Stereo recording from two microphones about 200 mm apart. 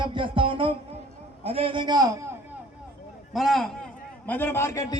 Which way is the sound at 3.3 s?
Centre (ahead or behind).